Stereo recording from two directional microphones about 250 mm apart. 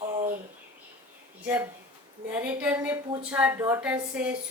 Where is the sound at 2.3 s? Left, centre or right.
Centre.